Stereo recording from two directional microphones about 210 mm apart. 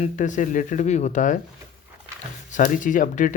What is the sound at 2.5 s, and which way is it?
Speech, 40° left (ahead or behind).